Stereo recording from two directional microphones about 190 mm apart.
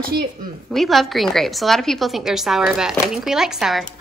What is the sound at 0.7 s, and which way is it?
A woman's voice, centre (ahead or behind).